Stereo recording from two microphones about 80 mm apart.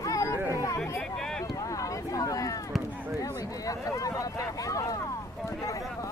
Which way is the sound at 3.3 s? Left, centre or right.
Left.